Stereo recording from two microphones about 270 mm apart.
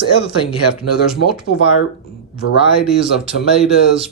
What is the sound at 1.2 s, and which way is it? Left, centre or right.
Speech, left.